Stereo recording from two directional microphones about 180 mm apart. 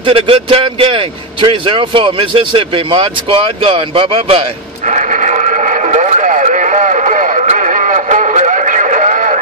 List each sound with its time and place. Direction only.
0.0 s a man's voice: 30° right (ahead or behind)
4.8 s radio: 45° right (ahead or behind)